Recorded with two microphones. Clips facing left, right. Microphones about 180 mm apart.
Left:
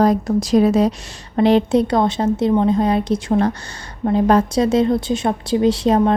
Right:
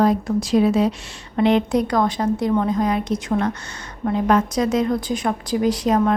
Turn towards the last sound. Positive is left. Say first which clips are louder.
# left 3 dB
turn(degrees=30)  # may be behind; listen again after turning